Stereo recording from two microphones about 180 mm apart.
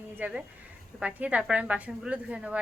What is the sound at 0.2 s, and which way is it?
A woman's voice, 10° right (ahead or behind).